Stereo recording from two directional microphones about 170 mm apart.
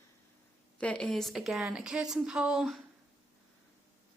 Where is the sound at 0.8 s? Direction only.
5° left (ahead or behind).